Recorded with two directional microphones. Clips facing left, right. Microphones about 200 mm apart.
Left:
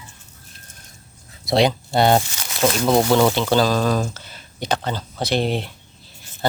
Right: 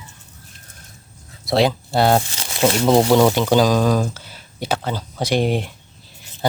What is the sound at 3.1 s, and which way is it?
Speech, 10° right (ahead or behind).